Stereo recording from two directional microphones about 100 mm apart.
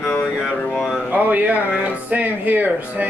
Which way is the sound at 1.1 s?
15° right (ahead or behind).